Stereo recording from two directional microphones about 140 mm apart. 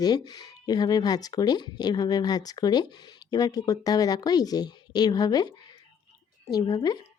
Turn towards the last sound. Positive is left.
turn(degrees=30)  # may be behind; listen again after turning